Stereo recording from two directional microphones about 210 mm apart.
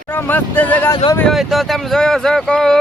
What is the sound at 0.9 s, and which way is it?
Speech, 20° left (ahead or behind).